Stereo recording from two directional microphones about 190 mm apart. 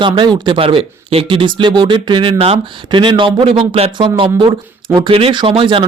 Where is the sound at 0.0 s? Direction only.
25° right (ahead or behind).